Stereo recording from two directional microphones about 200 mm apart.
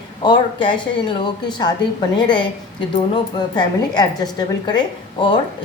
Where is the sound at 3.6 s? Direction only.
20° left (ahead or behind).